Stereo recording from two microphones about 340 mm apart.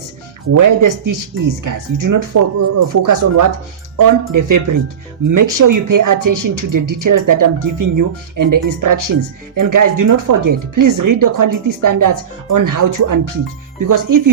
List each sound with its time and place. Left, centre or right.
0.5 s speech: right